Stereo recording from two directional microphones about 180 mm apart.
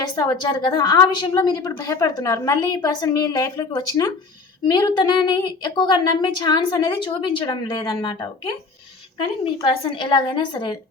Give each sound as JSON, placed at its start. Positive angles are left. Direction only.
{"t": 0.0, "sound": "a woman's voice", "side_deg": 20}